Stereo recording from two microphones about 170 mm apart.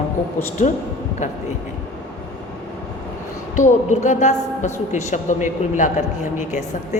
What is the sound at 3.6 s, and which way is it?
A woman's voice, 45° left (ahead or behind).